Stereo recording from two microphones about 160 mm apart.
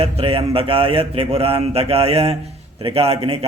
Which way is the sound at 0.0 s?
35° right (ahead or behind).